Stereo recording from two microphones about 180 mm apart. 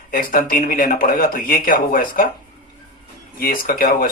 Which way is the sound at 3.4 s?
55° left (ahead or behind).